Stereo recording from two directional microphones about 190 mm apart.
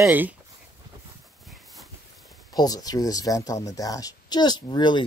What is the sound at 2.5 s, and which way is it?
Speech, 20° left (ahead or behind).